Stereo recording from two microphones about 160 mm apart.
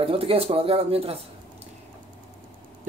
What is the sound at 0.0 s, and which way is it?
A man's voice, 35° right (ahead or behind).